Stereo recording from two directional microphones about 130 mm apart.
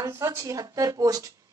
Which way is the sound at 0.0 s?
25° right (ahead or behind).